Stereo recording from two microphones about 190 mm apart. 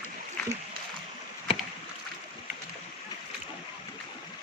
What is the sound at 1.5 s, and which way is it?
Rowboat, 30° left (ahead or behind).